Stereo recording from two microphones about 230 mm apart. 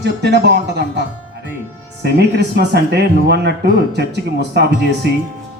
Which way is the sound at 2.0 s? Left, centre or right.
Right.